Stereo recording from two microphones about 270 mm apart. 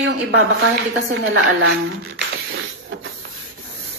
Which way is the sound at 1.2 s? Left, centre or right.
Right.